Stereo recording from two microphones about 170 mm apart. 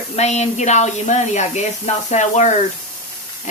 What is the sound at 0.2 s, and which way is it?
Speech, 40° left (ahead or behind).